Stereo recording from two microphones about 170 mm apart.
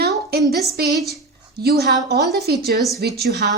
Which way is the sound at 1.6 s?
70° right (ahead or behind).